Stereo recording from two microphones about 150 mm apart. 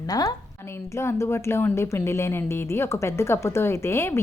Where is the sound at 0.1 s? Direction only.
25° left (ahead or behind).